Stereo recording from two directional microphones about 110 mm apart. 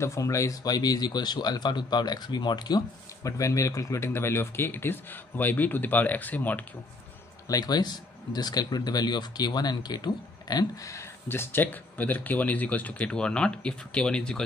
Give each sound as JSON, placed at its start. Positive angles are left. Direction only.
{"t": 0.0, "sound": "speech", "side_deg": 25}
{"t": 3.3, "sound": "speech", "side_deg": 30}
{"t": 7.4, "sound": "speech", "side_deg": 35}